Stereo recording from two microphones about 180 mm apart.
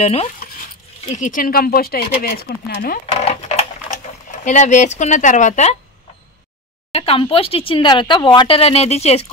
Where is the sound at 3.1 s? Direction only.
35° left (ahead or behind).